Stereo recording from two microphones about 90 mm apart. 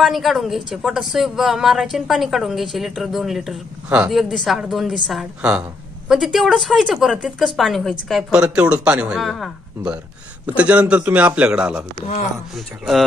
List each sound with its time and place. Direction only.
0.0 s a woman's voice: centre (ahead or behind)
5.2 s a man's voice: 10° right (ahead or behind)
9.2 s a woman's voice: centre (ahead or behind)
10.4 s a man's voice: 15° right (ahead or behind)
12.5 s a woman's voice: centre (ahead or behind)